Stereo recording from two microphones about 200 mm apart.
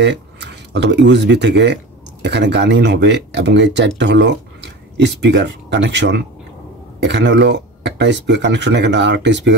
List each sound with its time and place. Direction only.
0.0 s speech: 60° right (ahead or behind)